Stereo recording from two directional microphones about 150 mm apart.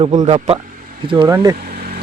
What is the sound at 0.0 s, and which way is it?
Speech, 50° right (ahead or behind).